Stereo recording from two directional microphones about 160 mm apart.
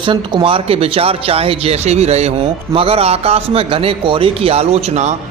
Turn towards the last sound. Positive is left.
turn(degrees=-45)  # may be behind; listen again after turning